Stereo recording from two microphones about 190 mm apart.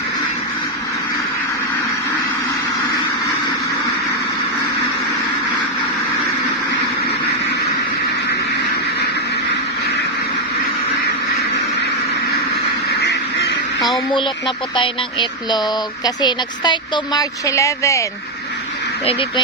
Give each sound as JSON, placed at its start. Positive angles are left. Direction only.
{"t": 13.0, "sound": "duck", "side_deg": 60}
{"t": 14.1, "sound": "speech", "side_deg": 25}